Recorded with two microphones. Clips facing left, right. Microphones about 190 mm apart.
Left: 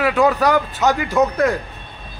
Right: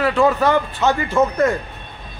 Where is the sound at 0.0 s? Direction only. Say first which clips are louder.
Even; 10° left (ahead or behind).